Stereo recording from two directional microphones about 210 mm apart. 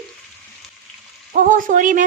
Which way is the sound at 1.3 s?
40° right (ahead or behind).